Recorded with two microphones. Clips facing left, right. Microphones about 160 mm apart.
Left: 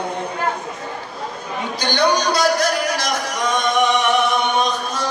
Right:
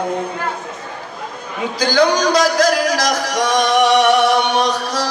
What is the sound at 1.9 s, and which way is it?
Music, 90° right.